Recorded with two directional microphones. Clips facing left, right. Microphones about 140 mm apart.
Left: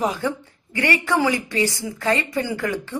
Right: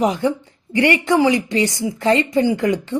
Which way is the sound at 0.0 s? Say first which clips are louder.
Right 5 dB; 20° right (ahead or behind).